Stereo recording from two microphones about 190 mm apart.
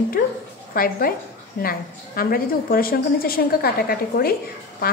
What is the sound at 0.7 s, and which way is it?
A woman's voice, 50° left (ahead or behind).